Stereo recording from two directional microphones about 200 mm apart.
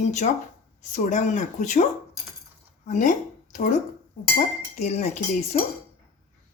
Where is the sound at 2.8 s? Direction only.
40° left (ahead or behind).